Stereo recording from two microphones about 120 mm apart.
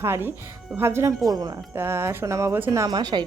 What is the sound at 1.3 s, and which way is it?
Speech, 35° right (ahead or behind).